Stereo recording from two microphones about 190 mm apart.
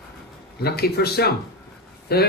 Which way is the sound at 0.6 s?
55° left (ahead or behind).